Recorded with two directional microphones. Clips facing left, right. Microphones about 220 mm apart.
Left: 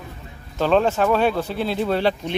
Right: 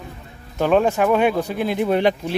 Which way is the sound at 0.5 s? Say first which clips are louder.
Right 1 dB; 15° right (ahead or behind).